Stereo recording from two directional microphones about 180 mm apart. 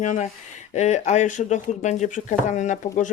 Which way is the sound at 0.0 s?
45° left (ahead or behind).